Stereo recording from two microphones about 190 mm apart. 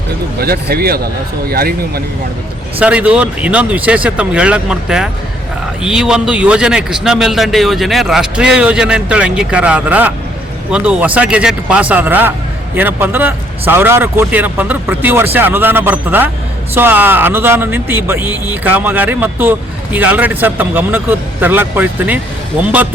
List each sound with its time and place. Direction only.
0.3 s speech: 55° right (ahead or behind)
2.7 s a man's voice: 5° right (ahead or behind)